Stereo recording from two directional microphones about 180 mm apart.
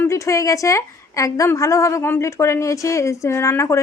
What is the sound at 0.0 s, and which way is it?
A woman's voice, 15° left (ahead or behind).